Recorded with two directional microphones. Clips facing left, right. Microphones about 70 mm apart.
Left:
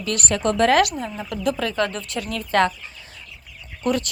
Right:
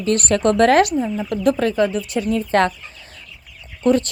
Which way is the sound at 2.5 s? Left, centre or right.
Right.